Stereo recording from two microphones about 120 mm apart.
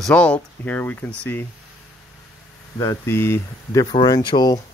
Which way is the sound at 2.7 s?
25° left (ahead or behind).